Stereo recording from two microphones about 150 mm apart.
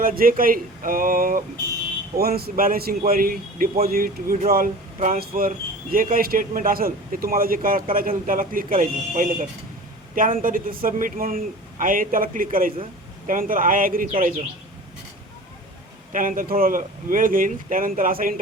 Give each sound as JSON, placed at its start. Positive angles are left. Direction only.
{"t": 0.0, "sound": "speech", "side_deg": -70}
{"t": 2.1, "sound": "speech", "side_deg": -90}
{"t": 4.9, "sound": "speech", "side_deg": -55}
{"t": 5.2, "sound": "speech", "side_deg": -70}
{"t": 16.1, "sound": "speech", "side_deg": -65}